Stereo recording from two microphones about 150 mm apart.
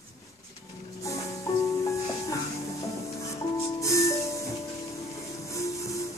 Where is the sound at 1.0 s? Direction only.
20° left (ahead or behind).